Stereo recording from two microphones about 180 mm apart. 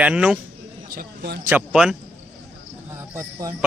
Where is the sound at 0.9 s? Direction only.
60° right (ahead or behind).